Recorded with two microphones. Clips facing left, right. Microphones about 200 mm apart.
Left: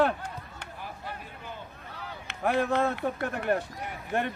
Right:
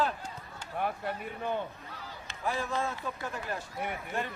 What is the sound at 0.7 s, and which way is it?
Speech, 60° right (ahead or behind).